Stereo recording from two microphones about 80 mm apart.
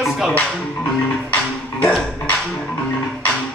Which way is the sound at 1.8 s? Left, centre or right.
Centre.